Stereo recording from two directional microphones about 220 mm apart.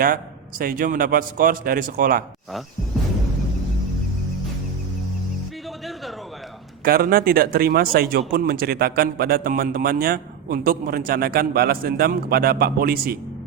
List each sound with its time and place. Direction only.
0.6 s a man's voice: 40° right (ahead or behind)
6.8 s a man's voice: 45° right (ahead or behind)